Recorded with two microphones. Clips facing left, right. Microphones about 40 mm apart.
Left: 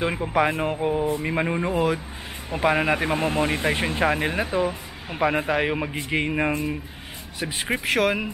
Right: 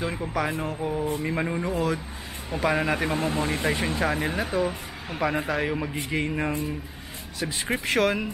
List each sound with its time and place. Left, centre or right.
0.3 s speech: left
7.8 s speech: centre